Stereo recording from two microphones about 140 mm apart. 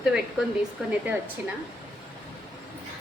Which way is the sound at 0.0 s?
5° right (ahead or behind).